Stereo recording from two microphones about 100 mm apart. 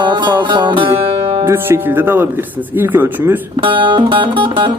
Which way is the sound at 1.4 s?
25° right (ahead or behind).